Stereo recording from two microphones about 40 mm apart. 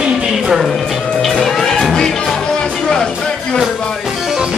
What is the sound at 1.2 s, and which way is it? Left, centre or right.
Music, centre.